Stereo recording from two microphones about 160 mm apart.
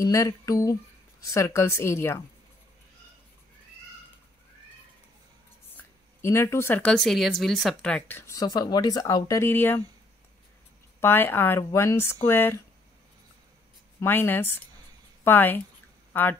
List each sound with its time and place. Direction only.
0.0 s speech: 20° left (ahead or behind)
5.8 s speech: 15° left (ahead or behind)
11.0 s speech: 15° left (ahead or behind)
13.9 s speech: 10° left (ahead or behind)